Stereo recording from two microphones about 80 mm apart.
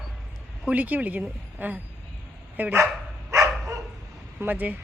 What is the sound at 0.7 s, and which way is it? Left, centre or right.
Speech, right.